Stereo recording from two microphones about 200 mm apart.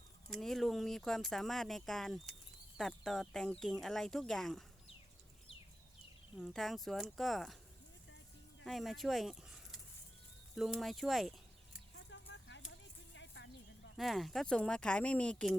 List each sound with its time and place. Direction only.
0.3 s speech: centre (ahead or behind)
6.3 s speech: centre (ahead or behind)
8.6 s speech: centre (ahead or behind)
12.1 s a sound: 65° left (ahead or behind)
13.9 s speech: centre (ahead or behind)